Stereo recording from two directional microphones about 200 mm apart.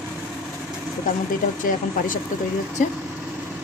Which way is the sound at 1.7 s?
40° left (ahead or behind).